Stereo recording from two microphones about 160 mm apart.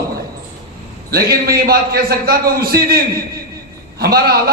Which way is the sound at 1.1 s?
70° right (ahead or behind).